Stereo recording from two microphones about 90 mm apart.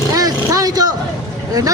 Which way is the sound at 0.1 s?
40° right (ahead or behind).